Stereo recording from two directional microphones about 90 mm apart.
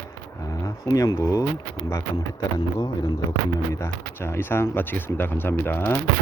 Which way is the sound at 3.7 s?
30° left (ahead or behind).